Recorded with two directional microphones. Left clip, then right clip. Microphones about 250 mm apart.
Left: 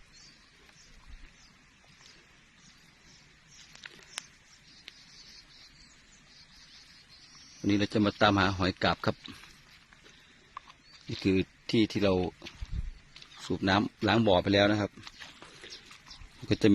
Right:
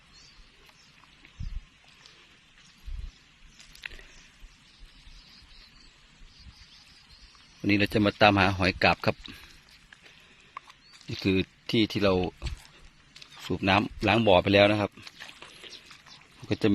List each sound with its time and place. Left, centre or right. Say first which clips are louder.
7.7 s a man's voice: right 4 dB; centre
10.6 s wild animals: right 2 dB; right
11.2 s speech: right 2 dB; centre
13.5 s speech: right 3 dB; centre
16.5 s speech: left 1 dB; centre